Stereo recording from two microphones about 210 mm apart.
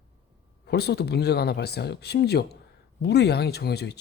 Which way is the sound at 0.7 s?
50° left (ahead or behind).